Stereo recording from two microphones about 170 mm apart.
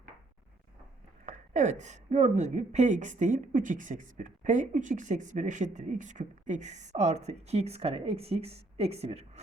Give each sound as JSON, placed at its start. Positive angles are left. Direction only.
{"t": 1.2, "sound": "a woman's voice", "side_deg": -45}